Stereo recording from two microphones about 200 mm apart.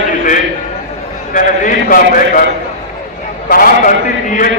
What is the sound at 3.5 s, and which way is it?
A man's voice, 45° left (ahead or behind).